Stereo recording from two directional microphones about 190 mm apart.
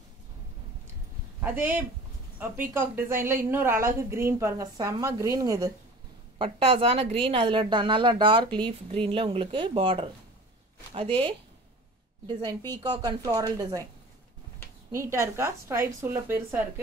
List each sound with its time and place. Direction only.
1.4 s a woman's voice: 10° right (ahead or behind)
6.3 s a woman's voice: 30° right (ahead or behind)
12.8 s a woman's voice: 20° right (ahead or behind)
14.9 s a woman's voice: 15° right (ahead or behind)